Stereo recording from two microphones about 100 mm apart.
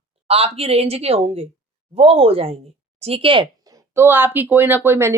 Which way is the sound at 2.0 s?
70° right (ahead or behind).